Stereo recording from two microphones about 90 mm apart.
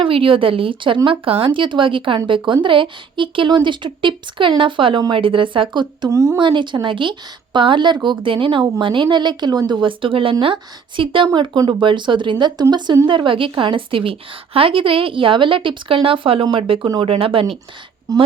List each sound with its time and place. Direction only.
0.0 s speech: 85° right; by 6.1 s 55° right (ahead or behind)
6.1 s speech: 35° right (ahead or behind)
6.3 s a woman's voice: 60° right (ahead or behind)
11.3 s a woman's voice: 55° right (ahead or behind)
13.1 s speech: 65° right (ahead or behind); by 17.4 s 85° right
18.1 s speech: 40° right (ahead or behind)